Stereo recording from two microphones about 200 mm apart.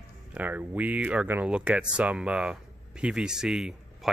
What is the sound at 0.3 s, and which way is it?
Speech, 10° right (ahead or behind).